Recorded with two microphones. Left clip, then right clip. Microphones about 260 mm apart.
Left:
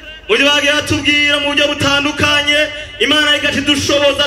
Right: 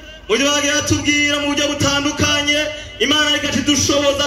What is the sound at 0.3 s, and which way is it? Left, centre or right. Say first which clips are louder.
A man's voice: left 5 dB; centre.